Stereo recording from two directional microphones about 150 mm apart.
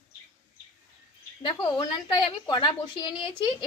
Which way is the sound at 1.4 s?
30° left (ahead or behind).